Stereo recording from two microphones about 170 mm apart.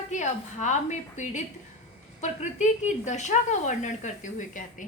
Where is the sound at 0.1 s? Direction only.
45° left (ahead or behind).